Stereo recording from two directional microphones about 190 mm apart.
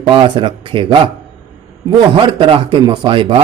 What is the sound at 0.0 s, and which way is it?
A man's voice, 25° right (ahead or behind).